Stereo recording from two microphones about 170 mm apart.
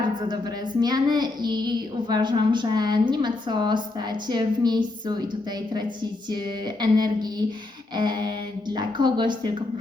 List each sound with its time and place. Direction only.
0.8 s a child's voice: 25° right (ahead or behind)
6.3 s a child's voice: 25° right (ahead or behind)